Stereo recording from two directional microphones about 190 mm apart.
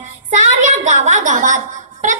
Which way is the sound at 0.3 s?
40° right (ahead or behind).